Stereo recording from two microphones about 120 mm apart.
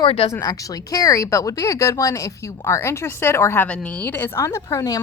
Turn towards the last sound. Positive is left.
turn(degrees=25)  # may be behind; listen again after turning